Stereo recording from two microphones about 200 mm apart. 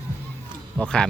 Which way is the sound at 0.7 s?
5° left (ahead or behind).